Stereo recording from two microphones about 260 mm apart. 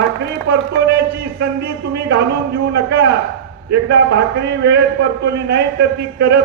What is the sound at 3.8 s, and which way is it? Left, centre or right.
A man's voice, right.